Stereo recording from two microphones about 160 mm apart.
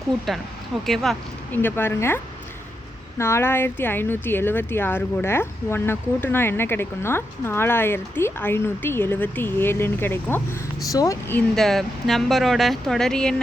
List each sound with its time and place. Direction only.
0.9 s speech: centre (ahead or behind)
1.5 s speech: 15° left (ahead or behind)
11.5 s speech: centre (ahead or behind)